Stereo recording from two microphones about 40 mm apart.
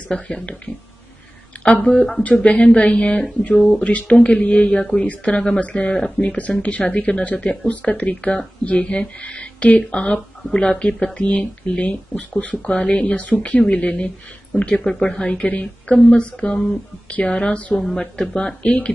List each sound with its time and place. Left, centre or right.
1.6 s speech: left
6.3 s speech: left
17.9 s speech: left